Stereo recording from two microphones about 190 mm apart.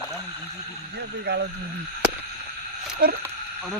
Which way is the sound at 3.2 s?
5° right (ahead or behind).